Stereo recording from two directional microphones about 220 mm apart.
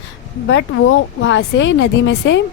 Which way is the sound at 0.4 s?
60° left (ahead or behind).